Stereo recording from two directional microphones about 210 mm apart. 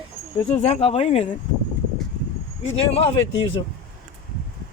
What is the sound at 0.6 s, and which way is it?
Speech, 30° left (ahead or behind).